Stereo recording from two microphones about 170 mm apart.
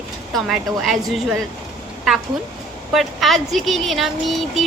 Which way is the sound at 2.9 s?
Centre (ahead or behind).